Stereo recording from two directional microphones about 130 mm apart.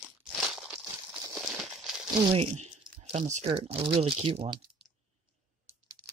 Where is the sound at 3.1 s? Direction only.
55° right (ahead or behind).